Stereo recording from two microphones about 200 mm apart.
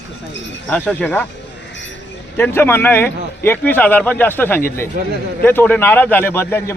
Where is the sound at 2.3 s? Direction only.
10° left (ahead or behind).